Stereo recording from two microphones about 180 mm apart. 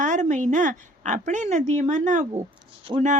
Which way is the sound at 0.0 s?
45° right (ahead or behind).